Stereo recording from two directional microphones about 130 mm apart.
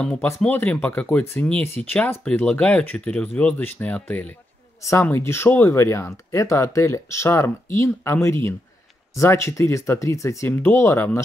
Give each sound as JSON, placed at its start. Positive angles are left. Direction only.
{"t": 0.0, "sound": "speech", "side_deg": 10}